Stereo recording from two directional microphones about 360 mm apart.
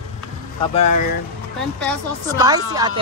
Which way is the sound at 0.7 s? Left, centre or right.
Centre.